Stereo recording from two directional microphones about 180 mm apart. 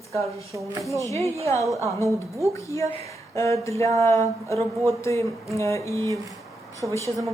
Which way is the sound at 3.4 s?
15° left (ahead or behind).